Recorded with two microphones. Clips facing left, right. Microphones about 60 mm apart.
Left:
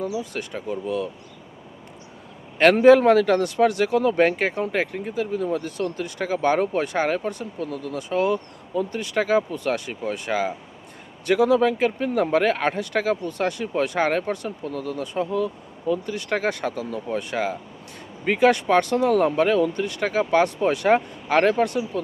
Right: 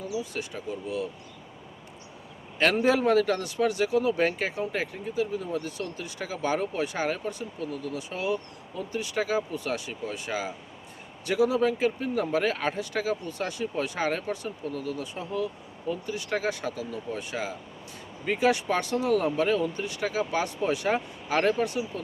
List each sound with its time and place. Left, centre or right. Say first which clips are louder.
0.0 s speech: left 5 dB; left
2.6 s speech: left 10 dB; left